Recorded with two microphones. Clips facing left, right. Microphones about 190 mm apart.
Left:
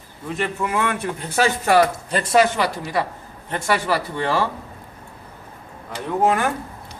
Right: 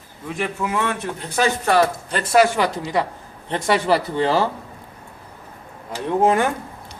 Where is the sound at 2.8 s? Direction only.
15° right (ahead or behind).